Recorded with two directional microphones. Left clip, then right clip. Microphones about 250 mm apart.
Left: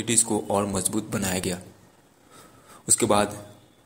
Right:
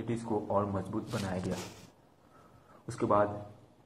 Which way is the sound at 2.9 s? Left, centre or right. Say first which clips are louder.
Left 6 dB; left.